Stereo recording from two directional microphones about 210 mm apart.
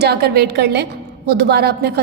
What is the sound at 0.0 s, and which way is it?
A woman's voice, 50° right (ahead or behind).